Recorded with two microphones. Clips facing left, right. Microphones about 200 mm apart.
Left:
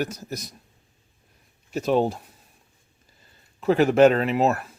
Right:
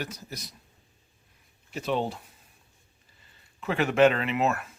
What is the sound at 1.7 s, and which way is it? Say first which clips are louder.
Speech: left 7 dB; 45° left (ahead or behind).